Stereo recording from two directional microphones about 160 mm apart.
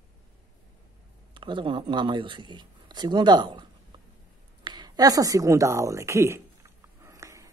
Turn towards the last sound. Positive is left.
turn(degrees=-20)  # may be behind; listen again after turning